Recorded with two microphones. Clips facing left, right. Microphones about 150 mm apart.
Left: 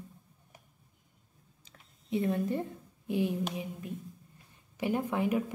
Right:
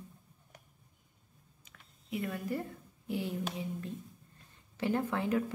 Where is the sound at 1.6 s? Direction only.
30° left (ahead or behind).